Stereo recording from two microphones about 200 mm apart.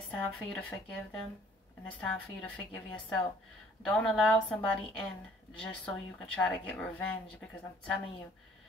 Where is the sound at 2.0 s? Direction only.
5° left (ahead or behind).